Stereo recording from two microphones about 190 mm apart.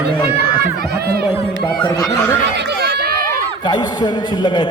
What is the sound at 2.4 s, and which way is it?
Run, 60° right (ahead or behind).